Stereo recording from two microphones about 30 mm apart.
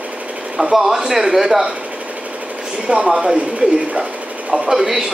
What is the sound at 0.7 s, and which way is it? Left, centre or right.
Speech, centre.